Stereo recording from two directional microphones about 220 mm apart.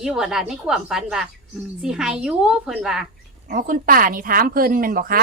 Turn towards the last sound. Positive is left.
turn(degrees=-40)  # may be behind; listen again after turning